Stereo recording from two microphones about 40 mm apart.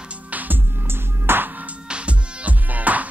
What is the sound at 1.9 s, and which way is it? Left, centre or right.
Music, right.